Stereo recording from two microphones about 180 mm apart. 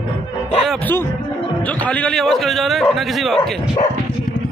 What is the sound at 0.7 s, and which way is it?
Speech, 10° left (ahead or behind).